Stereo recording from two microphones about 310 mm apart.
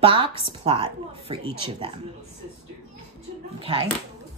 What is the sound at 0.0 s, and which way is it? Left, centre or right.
Speech, centre.